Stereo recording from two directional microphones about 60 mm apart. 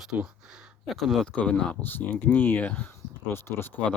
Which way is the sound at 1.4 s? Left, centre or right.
Left.